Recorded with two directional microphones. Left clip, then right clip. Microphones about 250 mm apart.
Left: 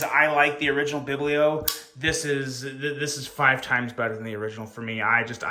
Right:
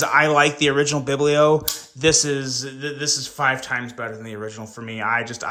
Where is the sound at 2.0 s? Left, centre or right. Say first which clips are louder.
Right 7 dB; centre.